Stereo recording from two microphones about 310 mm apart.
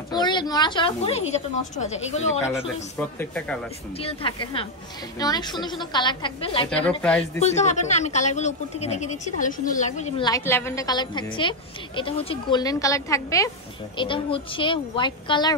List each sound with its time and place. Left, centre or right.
0.1 s a woman's voice: centre
3.0 s speech: centre
4.0 s a woman's voice: centre
7.0 s speech: centre
7.4 s a woman's voice: left